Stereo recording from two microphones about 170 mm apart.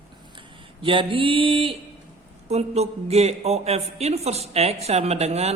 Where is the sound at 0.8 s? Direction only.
30° right (ahead or behind).